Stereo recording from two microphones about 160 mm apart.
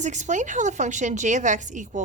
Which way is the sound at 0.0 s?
50° right (ahead or behind).